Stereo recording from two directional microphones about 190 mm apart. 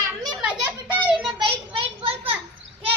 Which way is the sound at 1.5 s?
30° right (ahead or behind).